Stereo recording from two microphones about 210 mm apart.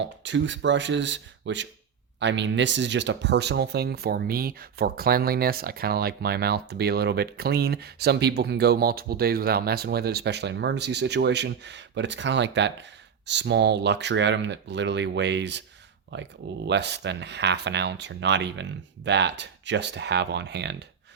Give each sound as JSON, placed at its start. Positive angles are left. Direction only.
{"t": 0.0, "sound": "speech", "side_deg": -60}